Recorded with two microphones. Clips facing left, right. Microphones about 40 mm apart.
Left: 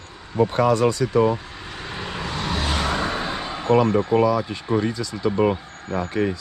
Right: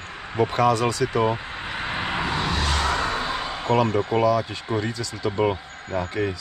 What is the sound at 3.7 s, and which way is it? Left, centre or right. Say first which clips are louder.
Speech: left 3 dB; right.